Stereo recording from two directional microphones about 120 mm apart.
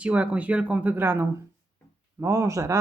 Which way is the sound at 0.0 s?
10° right (ahead or behind).